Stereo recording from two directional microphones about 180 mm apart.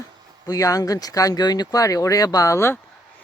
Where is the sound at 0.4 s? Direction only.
20° left (ahead or behind).